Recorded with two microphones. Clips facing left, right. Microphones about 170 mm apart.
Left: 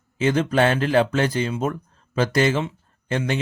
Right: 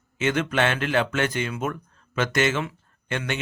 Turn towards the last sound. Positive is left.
turn(degrees=35)  # may be behind; listen again after turning